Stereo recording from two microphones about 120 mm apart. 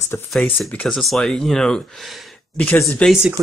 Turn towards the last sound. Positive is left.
turn(degrees=5)  # may be behind; listen again after turning